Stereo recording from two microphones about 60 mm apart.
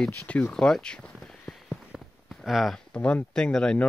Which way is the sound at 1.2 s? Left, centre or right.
Centre.